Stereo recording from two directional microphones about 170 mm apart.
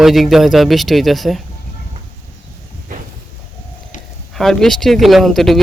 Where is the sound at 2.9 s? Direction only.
50° right (ahead or behind).